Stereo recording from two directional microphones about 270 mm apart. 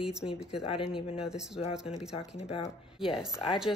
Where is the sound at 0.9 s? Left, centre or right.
Left.